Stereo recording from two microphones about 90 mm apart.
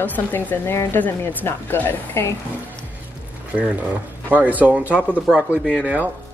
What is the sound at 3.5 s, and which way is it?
Speech, 10° right (ahead or behind).